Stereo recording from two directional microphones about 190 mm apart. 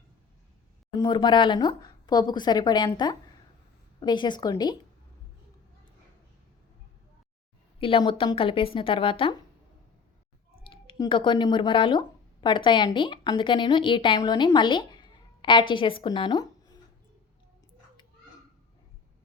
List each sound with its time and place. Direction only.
0.9 s speech: 25° left (ahead or behind)
7.8 s speech: 25° left (ahead or behind)
10.6 s speech: 25° left (ahead or behind)